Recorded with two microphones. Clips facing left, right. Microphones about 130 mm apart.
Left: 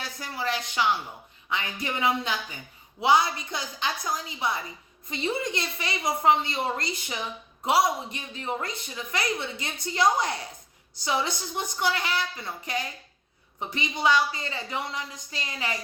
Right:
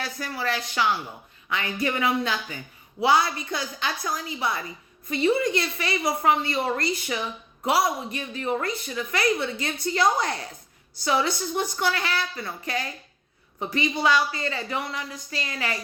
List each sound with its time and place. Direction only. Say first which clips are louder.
0.0 s a woman's voice: right 2 dB; 20° left (ahead or behind)